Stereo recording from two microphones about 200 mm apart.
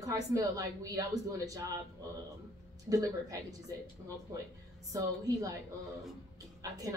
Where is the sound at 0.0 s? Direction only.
15° right (ahead or behind).